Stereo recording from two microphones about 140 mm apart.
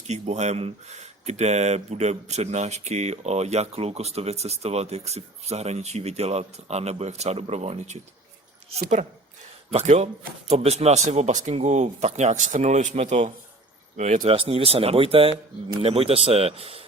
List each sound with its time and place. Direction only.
0.1 s speech: 55° right (ahead or behind)
14.3 s speech: 40° right (ahead or behind)